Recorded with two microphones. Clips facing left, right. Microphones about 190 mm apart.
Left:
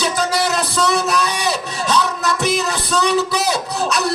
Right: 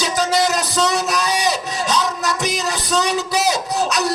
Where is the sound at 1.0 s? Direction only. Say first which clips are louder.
Even; 60° left (ahead or behind).